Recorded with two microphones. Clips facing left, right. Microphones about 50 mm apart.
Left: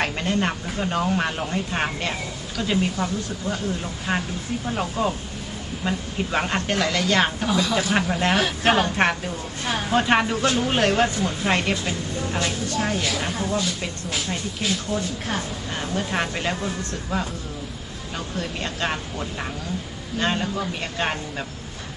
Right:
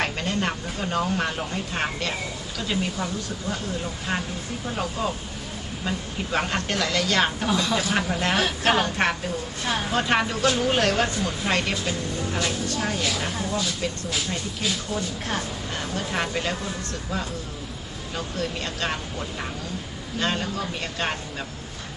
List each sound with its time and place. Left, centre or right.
0.0 s a woman's voice: centre
4.1 s a woman's voice: centre
18.3 s a woman's voice: centre
20.2 s a woman's voice: centre